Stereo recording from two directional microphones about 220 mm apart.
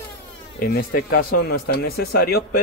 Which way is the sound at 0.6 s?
40° left (ahead or behind).